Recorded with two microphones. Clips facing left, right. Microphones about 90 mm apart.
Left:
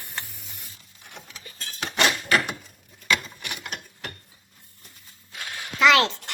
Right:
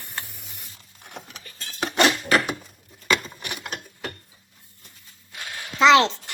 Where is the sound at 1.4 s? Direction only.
20° left (ahead or behind).